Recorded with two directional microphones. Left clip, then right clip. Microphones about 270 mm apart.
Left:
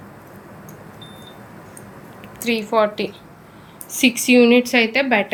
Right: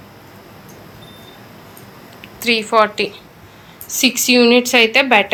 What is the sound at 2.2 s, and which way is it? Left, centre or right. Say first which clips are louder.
A woman's voice: right 6 dB; centre.